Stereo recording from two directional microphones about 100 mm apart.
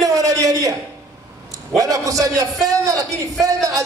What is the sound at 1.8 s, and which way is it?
A man's voice, 35° right (ahead or behind).